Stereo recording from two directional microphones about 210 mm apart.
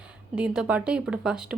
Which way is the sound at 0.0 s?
5° right (ahead or behind).